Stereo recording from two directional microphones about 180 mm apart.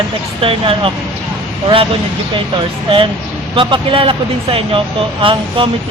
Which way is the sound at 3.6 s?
30° right (ahead or behind).